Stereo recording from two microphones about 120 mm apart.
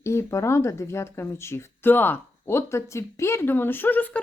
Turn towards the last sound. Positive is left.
turn(degrees=15)  # may be behind; listen again after turning